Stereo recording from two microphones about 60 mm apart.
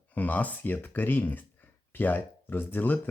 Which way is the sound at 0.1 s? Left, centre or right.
Left.